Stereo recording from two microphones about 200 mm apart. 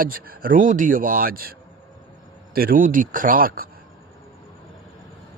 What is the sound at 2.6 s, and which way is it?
A man's voice, 45° right (ahead or behind).